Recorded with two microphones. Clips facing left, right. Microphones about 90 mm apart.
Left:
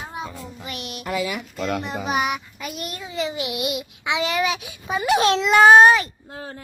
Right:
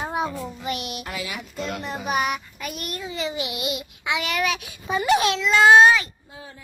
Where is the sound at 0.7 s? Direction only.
35° left (ahead or behind).